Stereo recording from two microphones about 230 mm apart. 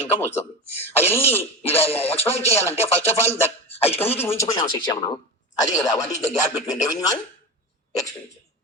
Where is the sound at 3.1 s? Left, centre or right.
Centre.